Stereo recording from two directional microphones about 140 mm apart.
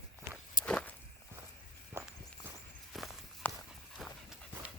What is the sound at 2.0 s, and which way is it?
Walk, 15° right (ahead or behind).